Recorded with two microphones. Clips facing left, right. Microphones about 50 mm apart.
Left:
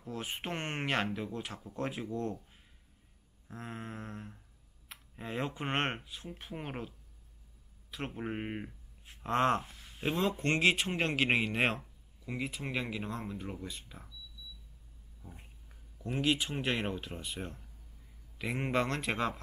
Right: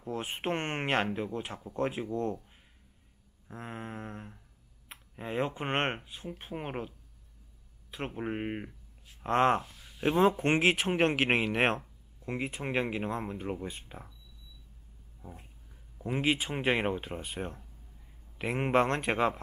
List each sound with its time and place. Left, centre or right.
0.0 s speech: right
4.9 s a sound: right
5.2 s speech: right
8.1 s speech: centre
9.3 s speech: right
9.8 s a sound: centre
10.0 s speech: right
12.3 s speech: right
16.0 s speech: right